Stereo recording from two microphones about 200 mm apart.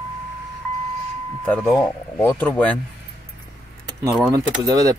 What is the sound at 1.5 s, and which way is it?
Speech, centre (ahead or behind).